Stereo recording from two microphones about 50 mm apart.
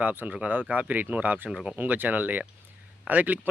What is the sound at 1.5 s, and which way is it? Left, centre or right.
Speech, centre.